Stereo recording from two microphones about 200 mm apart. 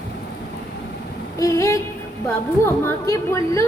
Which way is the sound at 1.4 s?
15° left (ahead or behind).